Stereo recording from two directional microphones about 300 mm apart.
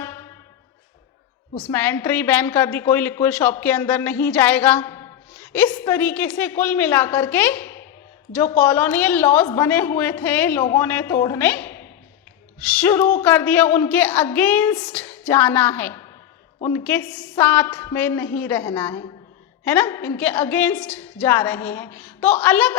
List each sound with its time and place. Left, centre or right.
0.0 s music: centre
1.6 s a woman's voice: centre